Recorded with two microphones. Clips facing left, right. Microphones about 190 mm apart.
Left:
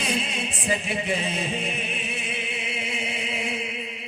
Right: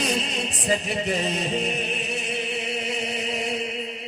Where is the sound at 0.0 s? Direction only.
40° right (ahead or behind).